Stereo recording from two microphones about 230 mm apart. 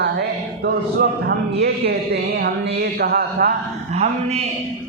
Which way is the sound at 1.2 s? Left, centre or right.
Right.